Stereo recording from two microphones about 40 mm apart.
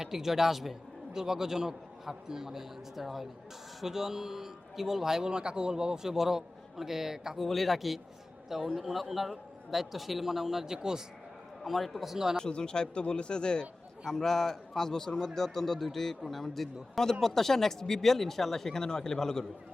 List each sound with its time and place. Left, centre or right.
0.0 s speech: centre
7.3 s a man's voice: centre
11.6 s a man's voice: centre
12.1 s speech: centre
12.4 s a man's voice: left
14.0 s a man's voice: centre